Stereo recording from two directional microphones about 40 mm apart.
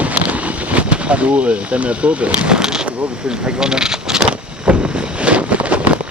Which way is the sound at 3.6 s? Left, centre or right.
Centre.